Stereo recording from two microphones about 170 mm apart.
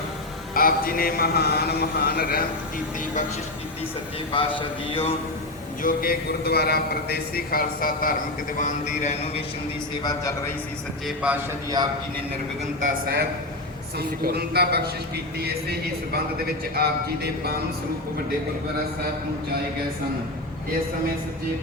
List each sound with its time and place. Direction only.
0.5 s a man's voice: 55° left (ahead or behind)
4.3 s a man's voice: 30° left (ahead or behind)
5.8 s a man's voice: 60° left (ahead or behind)
8.5 s speech: 45° left (ahead or behind)
10.0 s a man's voice: 20° left (ahead or behind)
11.0 s a man's voice: 5° right (ahead or behind)
12.8 s a woman's voice: 65° right (ahead or behind)
16.7 s speech: 65° right (ahead or behind)